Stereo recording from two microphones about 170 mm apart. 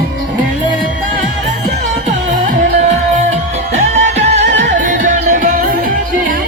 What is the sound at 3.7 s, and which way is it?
Music, 45° right (ahead or behind).